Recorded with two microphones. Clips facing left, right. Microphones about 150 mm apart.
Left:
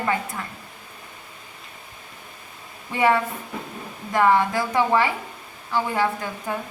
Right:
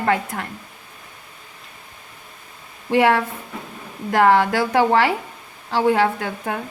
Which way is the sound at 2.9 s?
75° right (ahead or behind).